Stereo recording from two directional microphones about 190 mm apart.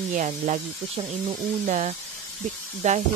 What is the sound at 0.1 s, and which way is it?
Speech, 40° right (ahead or behind).